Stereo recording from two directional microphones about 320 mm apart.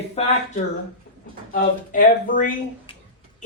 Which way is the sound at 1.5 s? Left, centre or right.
Left.